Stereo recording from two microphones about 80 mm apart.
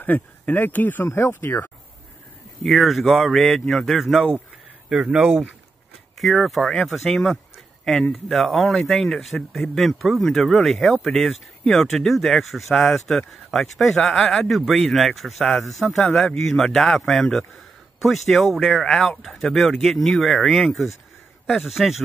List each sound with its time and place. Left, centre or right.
0.0 s speech: left
2.6 s speech: centre
6.1 s speech: centre